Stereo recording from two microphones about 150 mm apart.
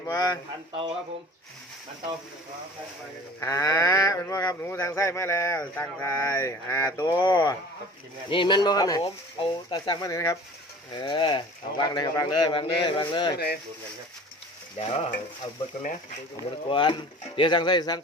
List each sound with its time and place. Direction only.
0.0 s a man's voice: 20° left (ahead or behind)
3.4 s speech: 20° left (ahead or behind)
7.2 s speech: 30° left (ahead or behind)
13.3 s speech: 90° left
14.8 s stir: 45° left (ahead or behind)
16.6 s speech: 35° left (ahead or behind)